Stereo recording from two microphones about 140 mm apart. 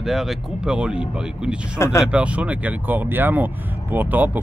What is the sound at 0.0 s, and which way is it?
Speech, centre (ahead or behind).